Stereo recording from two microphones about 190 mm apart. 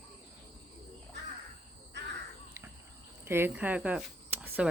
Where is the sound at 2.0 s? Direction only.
65° right (ahead or behind).